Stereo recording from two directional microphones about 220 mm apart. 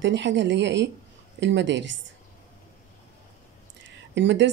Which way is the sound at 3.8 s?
55° right (ahead or behind).